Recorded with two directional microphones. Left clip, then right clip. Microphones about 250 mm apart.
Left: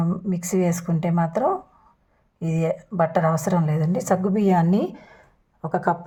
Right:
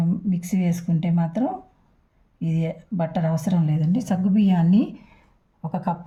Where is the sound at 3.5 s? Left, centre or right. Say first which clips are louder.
Left 4 dB; left.